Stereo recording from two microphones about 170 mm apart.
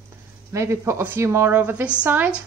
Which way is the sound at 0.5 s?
15° right (ahead or behind).